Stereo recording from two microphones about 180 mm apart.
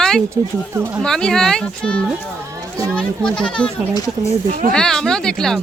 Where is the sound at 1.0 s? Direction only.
5° left (ahead or behind).